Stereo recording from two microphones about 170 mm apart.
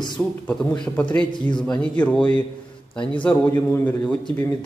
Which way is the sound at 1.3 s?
25° left (ahead or behind).